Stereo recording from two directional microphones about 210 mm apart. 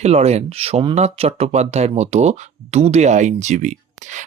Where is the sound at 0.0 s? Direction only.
30° right (ahead or behind).